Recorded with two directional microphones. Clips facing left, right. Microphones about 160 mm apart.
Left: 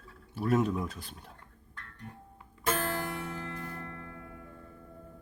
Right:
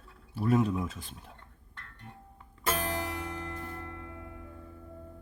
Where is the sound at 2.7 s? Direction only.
15° right (ahead or behind).